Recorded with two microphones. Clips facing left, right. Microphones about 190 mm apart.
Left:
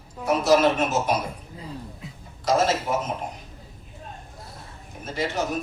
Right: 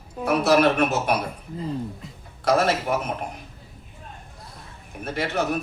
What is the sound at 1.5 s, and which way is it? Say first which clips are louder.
Speech: right 8 dB; centre (ahead or behind).